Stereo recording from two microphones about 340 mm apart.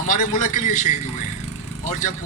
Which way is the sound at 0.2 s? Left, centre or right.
Left.